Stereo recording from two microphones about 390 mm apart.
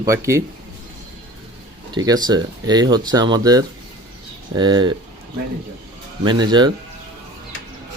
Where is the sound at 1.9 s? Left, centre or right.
Centre.